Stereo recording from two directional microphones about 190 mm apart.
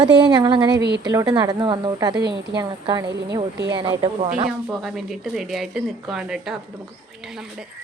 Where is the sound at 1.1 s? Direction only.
20° right (ahead or behind).